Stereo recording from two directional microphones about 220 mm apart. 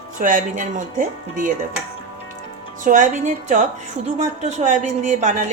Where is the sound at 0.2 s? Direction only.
35° right (ahead or behind).